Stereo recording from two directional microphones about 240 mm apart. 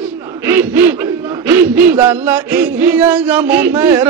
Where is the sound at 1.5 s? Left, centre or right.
Centre.